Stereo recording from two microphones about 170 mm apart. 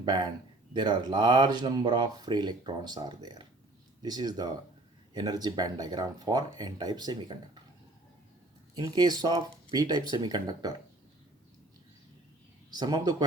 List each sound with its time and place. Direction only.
0.0 s speech: 25° right (ahead or behind)
8.7 s speech: 25° right (ahead or behind)
12.7 s speech: 25° right (ahead or behind)